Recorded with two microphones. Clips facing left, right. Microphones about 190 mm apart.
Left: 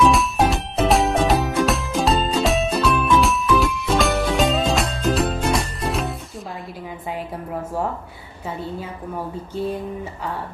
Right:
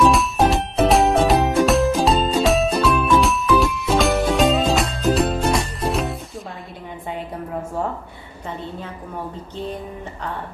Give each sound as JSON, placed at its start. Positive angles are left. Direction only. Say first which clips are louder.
{"t": 0.0, "sound": "music", "louder": "right 1 dB", "side_deg": 0}